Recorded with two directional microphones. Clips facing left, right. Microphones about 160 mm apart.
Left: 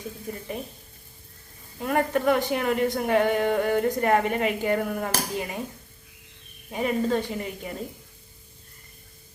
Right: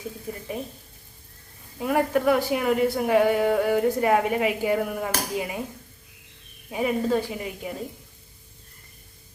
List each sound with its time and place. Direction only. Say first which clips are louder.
0.3 s a woman's voice: right 1 dB; centre (ahead or behind)
1.8 s a woman's voice: right 2 dB; 5° right (ahead or behind)
6.7 s a woman's voice: right 1 dB; 5° right (ahead or behind)